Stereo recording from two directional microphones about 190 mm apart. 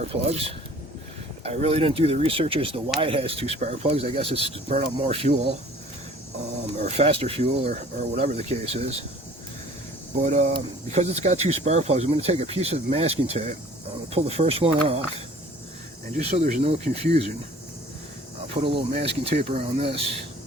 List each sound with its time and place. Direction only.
0.0 s speech: 30° right (ahead or behind)
6.8 s speech: 35° right (ahead or behind)
10.2 s speech: 40° right (ahead or behind)
16.1 s speech: 40° right (ahead or behind)
18.5 s speech: 30° right (ahead or behind)